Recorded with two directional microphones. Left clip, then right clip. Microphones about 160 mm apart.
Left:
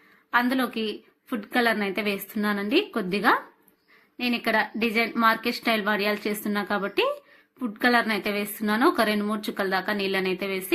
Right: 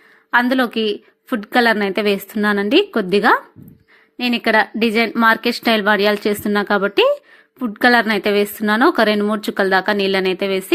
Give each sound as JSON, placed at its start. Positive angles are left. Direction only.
{"t": 0.3, "sound": "a woman's voice", "side_deg": -50}